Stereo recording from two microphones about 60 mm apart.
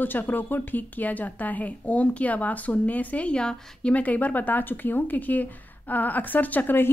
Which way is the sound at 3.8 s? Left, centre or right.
Left.